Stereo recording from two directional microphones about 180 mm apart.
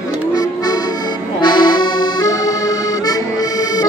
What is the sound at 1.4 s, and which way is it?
Accordion, 25° left (ahead or behind).